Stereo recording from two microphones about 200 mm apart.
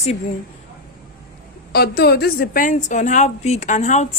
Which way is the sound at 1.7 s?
55° left (ahead or behind).